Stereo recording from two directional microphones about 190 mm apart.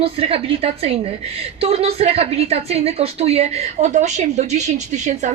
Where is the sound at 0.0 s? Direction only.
30° right (ahead or behind).